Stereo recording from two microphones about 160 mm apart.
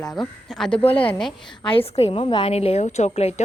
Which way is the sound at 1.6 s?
35° left (ahead or behind).